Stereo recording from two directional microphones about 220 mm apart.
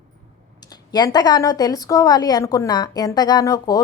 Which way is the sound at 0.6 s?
20° left (ahead or behind).